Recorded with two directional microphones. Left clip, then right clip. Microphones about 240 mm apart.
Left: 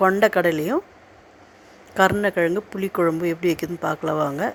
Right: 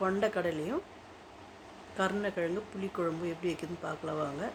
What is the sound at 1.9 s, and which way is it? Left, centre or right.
Speech, left.